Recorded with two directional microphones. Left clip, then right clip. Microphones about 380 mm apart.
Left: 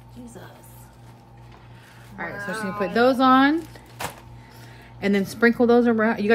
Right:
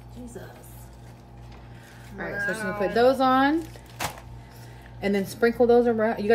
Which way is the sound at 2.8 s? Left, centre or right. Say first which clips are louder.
Left 2 dB; left.